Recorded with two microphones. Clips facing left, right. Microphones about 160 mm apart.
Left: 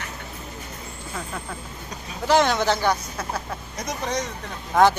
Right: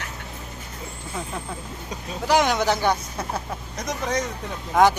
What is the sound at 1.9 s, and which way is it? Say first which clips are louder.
Speech: left 1 dB; 15° right (ahead or behind).